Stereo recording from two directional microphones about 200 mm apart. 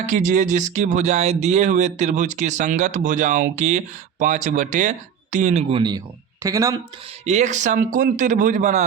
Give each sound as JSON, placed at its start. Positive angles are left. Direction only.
{"t": 0.0, "sound": "speech", "side_deg": -40}
{"t": 6.4, "sound": "speech", "side_deg": -15}
{"t": 7.3, "sound": "speech", "side_deg": -35}